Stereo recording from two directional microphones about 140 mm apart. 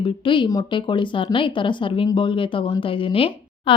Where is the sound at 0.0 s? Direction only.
35° left (ahead or behind).